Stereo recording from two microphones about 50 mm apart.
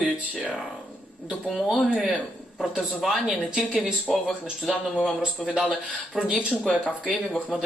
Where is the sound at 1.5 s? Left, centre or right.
Centre.